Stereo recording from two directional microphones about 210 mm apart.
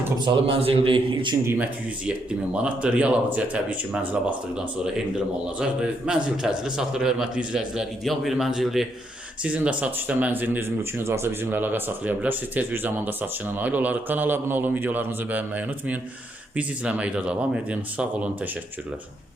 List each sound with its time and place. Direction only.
0.2 s a man's voice: 25° right (ahead or behind)
1.5 s a man's voice: 10° right (ahead or behind)